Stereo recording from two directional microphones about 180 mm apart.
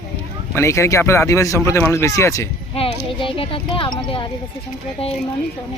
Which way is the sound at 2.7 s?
30° left (ahead or behind).